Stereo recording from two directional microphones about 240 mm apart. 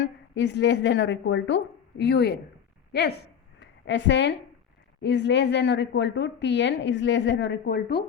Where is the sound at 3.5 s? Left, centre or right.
Left.